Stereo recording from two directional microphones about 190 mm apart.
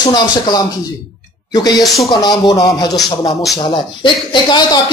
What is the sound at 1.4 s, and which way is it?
Speech, 20° left (ahead or behind).